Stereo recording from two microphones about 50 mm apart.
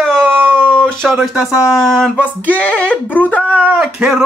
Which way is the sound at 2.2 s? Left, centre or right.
Left.